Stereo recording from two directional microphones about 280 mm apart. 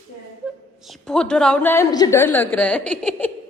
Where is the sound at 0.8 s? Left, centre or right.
Centre.